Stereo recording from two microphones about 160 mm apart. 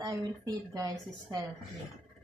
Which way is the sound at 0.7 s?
25° right (ahead or behind).